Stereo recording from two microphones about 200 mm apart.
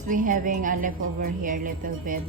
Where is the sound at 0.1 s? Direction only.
40° right (ahead or behind).